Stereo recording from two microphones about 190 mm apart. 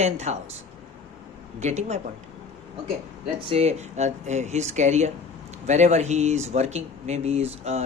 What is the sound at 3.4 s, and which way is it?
Speech, 35° right (ahead or behind).